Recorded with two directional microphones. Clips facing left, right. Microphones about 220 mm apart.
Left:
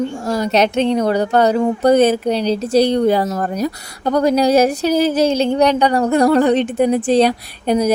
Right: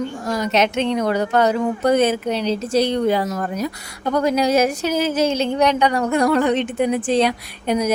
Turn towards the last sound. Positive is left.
turn(degrees=35)  # may be behind; listen again after turning